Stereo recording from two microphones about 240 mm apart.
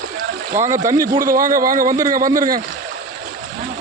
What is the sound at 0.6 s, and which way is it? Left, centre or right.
Speech, centre.